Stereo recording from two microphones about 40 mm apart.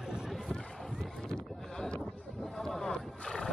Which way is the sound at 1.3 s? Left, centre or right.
Left.